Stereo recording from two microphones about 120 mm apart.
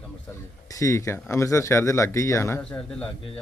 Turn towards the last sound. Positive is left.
turn(degrees=10)  # may be behind; listen again after turning